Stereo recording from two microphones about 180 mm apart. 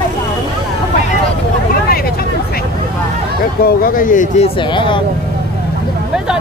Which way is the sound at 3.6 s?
50° left (ahead or behind).